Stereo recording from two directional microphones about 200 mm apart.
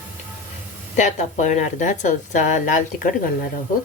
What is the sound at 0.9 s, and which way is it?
A woman's voice, 35° left (ahead or behind).